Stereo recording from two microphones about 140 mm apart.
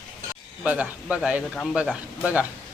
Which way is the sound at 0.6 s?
10° right (ahead or behind).